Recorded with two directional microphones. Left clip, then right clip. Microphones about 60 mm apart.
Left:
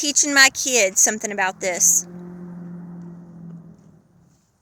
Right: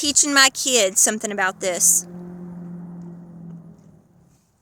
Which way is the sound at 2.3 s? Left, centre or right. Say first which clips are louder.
Even; centre.